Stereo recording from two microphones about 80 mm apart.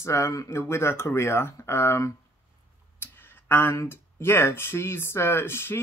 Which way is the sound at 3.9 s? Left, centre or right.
Left.